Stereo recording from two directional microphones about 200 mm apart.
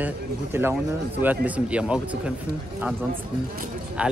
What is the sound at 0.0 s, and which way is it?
Speech, 10° right (ahead or behind).